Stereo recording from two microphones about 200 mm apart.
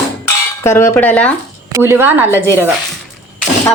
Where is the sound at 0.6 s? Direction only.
10° left (ahead or behind).